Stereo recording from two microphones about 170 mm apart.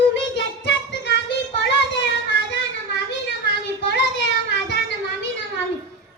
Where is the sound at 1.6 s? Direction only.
90° left.